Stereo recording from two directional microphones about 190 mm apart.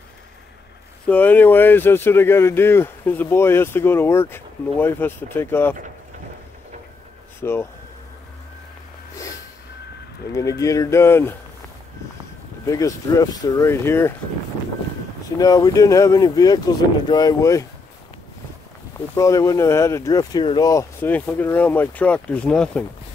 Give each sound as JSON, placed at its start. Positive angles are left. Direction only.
{"t": 1.0, "sound": "speech", "side_deg": 10}
{"t": 7.4, "sound": "speech", "side_deg": 10}
{"t": 10.6, "sound": "speech", "side_deg": 15}
{"t": 12.6, "sound": "speech", "side_deg": 15}
{"t": 15.3, "sound": "speech", "side_deg": 20}
{"t": 18.9, "sound": "speech", "side_deg": 15}